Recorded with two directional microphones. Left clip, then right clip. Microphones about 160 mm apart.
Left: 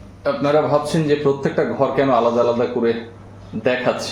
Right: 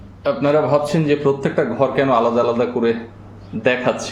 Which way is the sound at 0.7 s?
10° right (ahead or behind).